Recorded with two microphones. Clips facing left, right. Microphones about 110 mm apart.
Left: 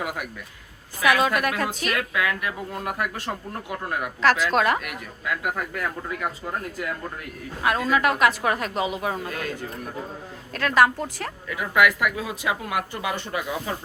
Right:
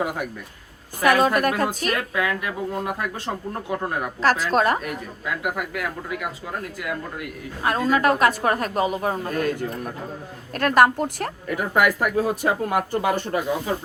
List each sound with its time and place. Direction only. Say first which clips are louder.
1.0 s a woman's voice: right 3 dB; 40° right (ahead or behind); by 3.9 s 20° right (ahead or behind)
4.2 s a woman's voice: right 1 dB; 40° right (ahead or behind)
5.4 s speech: right 3 dB; 20° right (ahead or behind)
7.6 s a woman's voice: right 2 dB; 30° right (ahead or behind)
10.5 s speech: right 3 dB; 50° right (ahead or behind)